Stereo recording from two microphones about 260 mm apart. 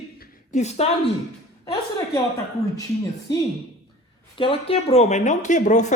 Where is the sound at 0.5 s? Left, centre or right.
Left.